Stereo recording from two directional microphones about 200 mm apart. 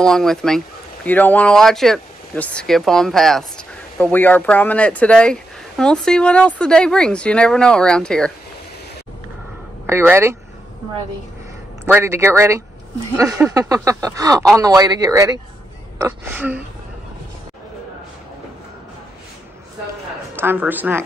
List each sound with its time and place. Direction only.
0.0 s speech: centre (ahead or behind)
9.8 s speech: 10° right (ahead or behind)
11.8 s speech: 10° right (ahead or behind)
20.3 s speech: 10° right (ahead or behind)